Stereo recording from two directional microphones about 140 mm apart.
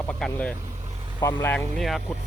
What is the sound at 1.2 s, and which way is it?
Speech, 20° left (ahead or behind).